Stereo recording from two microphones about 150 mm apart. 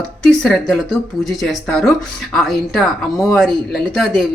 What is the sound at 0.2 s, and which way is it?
A man's voice, 5° left (ahead or behind).